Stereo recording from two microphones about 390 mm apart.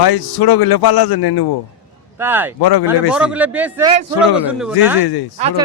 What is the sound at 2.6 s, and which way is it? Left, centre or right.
Speech, left.